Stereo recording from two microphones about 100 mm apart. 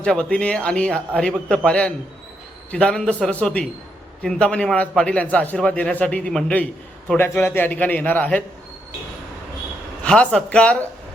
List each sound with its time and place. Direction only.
0.0 s a man's voice: 10° left (ahead or behind)
10.0 s a man's voice: 10° left (ahead or behind)